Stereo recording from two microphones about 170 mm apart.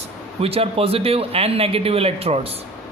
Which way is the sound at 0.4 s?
35° right (ahead or behind).